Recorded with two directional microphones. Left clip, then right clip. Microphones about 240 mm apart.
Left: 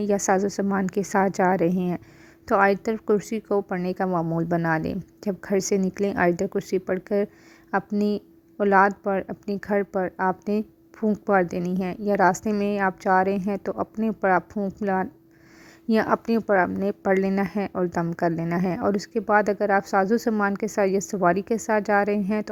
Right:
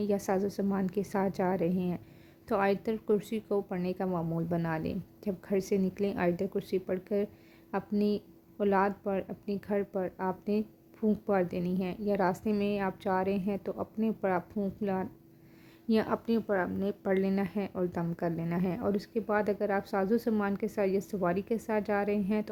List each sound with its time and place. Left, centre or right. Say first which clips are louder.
0.1 s a woman's voice: left 11 dB; left